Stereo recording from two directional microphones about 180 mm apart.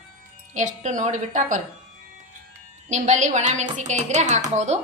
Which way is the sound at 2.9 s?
40° right (ahead or behind).